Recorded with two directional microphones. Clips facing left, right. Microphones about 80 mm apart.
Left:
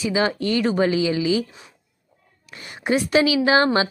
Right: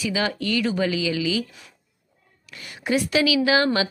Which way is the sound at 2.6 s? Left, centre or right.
Left.